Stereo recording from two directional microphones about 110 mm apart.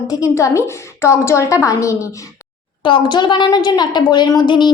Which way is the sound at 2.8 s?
45° left (ahead or behind).